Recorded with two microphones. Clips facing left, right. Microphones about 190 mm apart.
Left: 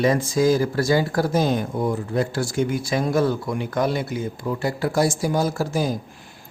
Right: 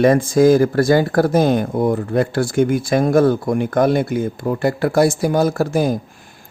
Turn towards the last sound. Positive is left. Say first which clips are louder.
# right 6 dB
turn(degrees=-55)  # may be behind; listen again after turning